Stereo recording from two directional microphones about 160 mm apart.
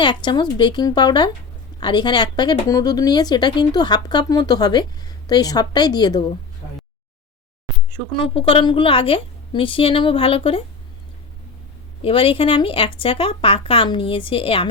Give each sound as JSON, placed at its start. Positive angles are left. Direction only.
{"t": 0.0, "sound": "speech", "side_deg": 30}
{"t": 8.2, "sound": "speech", "side_deg": 35}
{"t": 12.0, "sound": "speech", "side_deg": 35}